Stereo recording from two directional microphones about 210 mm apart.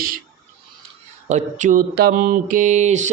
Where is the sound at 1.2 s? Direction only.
35° right (ahead or behind).